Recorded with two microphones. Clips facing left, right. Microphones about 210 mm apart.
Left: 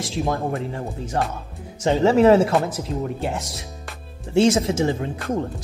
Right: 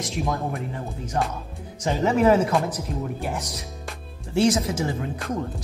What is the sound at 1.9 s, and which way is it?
Speech, 30° left (ahead or behind).